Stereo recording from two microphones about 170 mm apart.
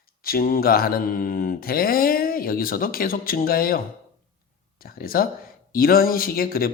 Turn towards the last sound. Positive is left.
turn(degrees=60)  # may be behind; listen again after turning